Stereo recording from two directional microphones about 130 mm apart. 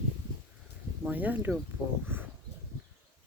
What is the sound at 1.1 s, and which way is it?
Speech, 15° right (ahead or behind).